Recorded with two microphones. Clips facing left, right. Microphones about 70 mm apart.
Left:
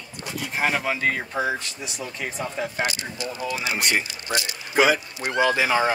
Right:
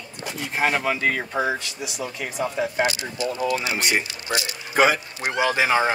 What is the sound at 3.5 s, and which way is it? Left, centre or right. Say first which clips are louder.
Speech: right 1 dB; centre.